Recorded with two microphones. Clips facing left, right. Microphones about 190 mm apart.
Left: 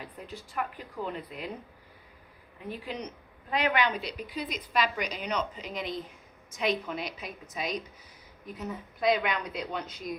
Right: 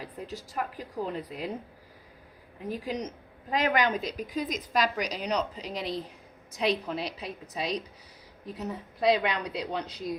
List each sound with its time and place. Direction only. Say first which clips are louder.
0.0 s a woman's voice: right 3 dB; 40° right (ahead or behind)
2.6 s a woman's voice: right 4 dB; 40° right (ahead or behind)